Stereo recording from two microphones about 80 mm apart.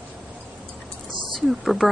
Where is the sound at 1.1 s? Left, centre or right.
Right.